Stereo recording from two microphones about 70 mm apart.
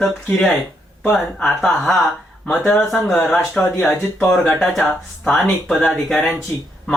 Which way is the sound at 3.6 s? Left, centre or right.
Left.